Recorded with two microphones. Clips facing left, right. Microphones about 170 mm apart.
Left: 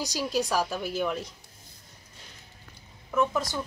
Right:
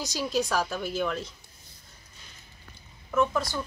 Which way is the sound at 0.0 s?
10° left (ahead or behind).